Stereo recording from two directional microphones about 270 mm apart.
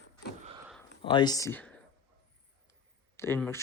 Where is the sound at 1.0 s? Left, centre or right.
Centre.